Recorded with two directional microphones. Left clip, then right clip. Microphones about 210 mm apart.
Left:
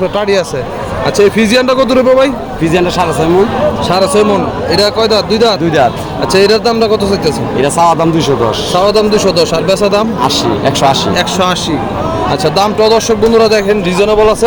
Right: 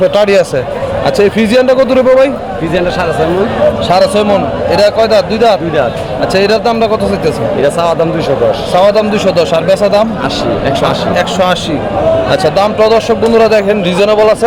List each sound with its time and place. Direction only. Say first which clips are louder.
0.2 s speech: right 3 dB; 20° right (ahead or behind)
1.0 s a man's voice: left 1 dB; 5° right (ahead or behind)
3.8 s a man's voice: left 1 dB; centre (ahead or behind)
7.6 s a man's voice: left 3 dB; 30° left (ahead or behind)
8.7 s a man's voice: even; centre (ahead or behind)
11.2 s a man's voice: right 1 dB; centre (ahead or behind)
12.5 s speech: left 1 dB; 10° left (ahead or behind)
13.3 s a man's voice: right 2 dB; 10° right (ahead or behind)